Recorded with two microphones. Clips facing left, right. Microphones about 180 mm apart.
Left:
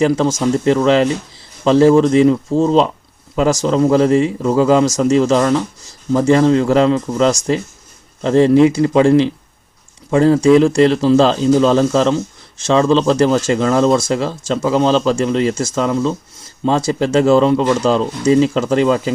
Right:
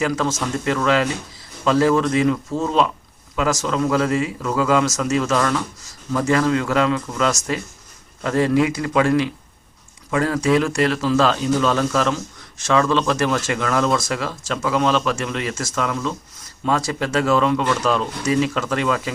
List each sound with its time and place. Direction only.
0.0 s speech: 30° left (ahead or behind)